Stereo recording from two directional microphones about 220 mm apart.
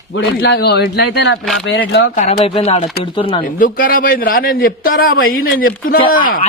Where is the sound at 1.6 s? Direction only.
55° left (ahead or behind).